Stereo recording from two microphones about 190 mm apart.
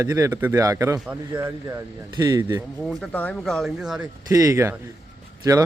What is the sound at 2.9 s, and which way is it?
Speech, 5° left (ahead or behind).